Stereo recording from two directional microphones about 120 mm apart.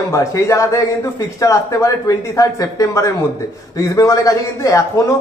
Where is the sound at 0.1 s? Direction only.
25° left (ahead or behind).